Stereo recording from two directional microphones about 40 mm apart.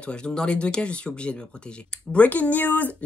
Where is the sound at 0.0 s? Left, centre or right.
Left.